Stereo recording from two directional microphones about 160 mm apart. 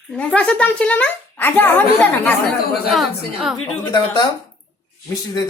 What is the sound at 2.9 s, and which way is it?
Speech, centre (ahead or behind).